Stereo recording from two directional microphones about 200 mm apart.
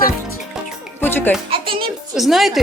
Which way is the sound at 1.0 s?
10° left (ahead or behind).